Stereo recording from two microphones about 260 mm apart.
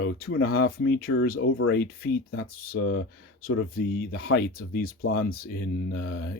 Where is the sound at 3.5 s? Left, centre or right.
Left.